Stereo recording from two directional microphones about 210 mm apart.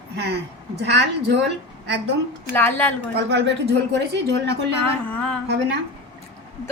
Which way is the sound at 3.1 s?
55° right (ahead or behind).